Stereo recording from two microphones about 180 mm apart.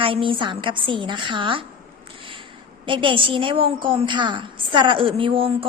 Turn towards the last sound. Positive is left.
turn(degrees=-30)  # may be behind; listen again after turning